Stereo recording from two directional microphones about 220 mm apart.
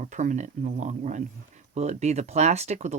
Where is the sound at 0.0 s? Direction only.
35° right (ahead or behind).